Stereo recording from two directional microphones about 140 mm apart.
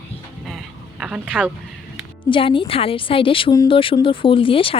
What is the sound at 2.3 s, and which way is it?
A woman's voice, 40° left (ahead or behind).